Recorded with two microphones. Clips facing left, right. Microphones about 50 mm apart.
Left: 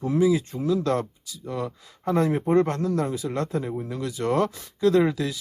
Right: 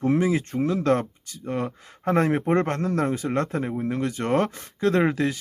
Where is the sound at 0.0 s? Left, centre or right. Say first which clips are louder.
Left 1 dB; right.